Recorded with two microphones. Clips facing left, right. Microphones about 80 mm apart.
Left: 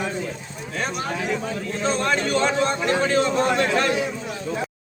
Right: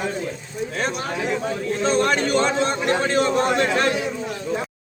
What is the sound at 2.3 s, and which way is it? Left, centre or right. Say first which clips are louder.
A man's voice: right 1 dB; right.